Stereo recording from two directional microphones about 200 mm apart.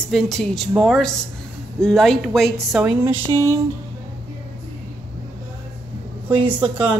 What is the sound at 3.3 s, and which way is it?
Speech, 15° right (ahead or behind).